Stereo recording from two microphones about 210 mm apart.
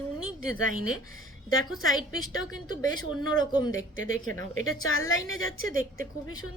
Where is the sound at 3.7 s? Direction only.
75° left (ahead or behind).